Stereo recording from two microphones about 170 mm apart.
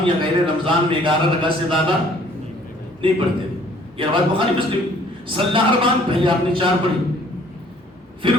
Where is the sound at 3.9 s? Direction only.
30° right (ahead or behind).